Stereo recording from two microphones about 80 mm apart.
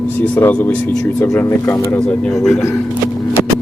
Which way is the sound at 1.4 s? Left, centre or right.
Left.